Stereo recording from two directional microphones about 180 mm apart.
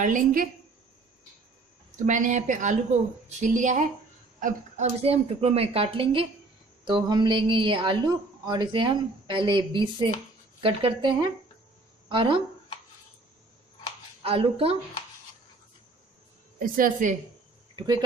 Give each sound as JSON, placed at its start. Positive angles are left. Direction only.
{"t": 0.0, "sound": "a woman's voice", "side_deg": -50}
{"t": 2.0, "sound": "a woman's voice", "side_deg": -45}
{"t": 14.2, "sound": "a woman's voice", "side_deg": -30}
{"t": 16.5, "sound": "a woman's voice", "side_deg": -50}
{"t": 17.7, "sound": "speech", "side_deg": -20}